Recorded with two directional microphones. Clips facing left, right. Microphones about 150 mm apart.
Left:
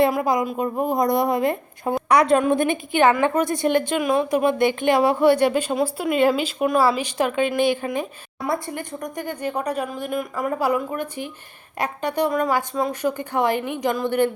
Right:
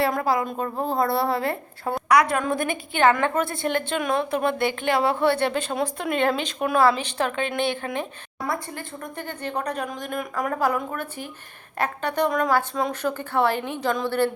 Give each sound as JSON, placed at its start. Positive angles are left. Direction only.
{"t": 0.2, "sound": "a woman's voice", "side_deg": 15}
{"t": 8.4, "sound": "speech", "side_deg": 20}